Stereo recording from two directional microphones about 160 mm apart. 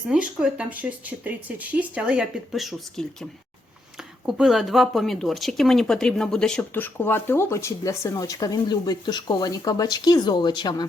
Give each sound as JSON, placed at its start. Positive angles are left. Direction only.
{"t": 0.1, "sound": "speech", "side_deg": -5}
{"t": 4.3, "sound": "speech", "side_deg": 0}